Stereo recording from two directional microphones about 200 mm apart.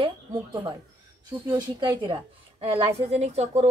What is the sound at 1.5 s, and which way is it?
Speech, 25° right (ahead or behind).